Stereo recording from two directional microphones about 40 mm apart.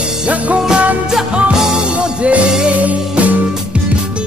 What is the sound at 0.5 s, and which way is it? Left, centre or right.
Music, right.